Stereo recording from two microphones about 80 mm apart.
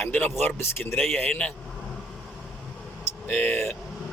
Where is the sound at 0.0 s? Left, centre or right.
Left.